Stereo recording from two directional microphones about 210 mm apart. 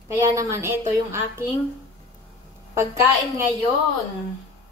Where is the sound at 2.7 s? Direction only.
15° right (ahead or behind).